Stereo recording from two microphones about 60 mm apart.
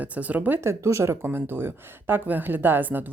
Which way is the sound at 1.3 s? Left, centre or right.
Right.